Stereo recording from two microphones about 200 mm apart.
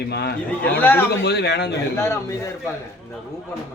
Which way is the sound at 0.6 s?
10° left (ahead or behind).